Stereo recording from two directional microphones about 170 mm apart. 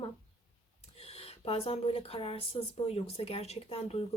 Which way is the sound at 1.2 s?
35° left (ahead or behind).